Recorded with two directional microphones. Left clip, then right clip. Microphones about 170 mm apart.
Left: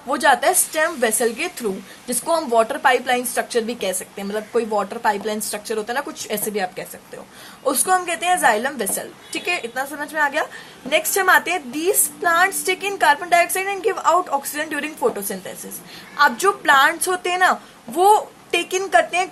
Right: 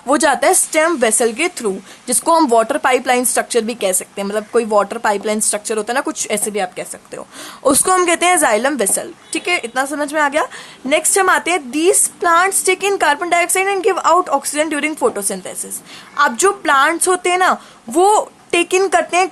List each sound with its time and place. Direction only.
0.1 s speech: 40° right (ahead or behind)
7.6 s speech: 40° right (ahead or behind)